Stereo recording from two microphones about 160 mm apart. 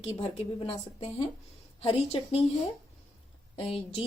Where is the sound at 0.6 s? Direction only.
35° left (ahead or behind).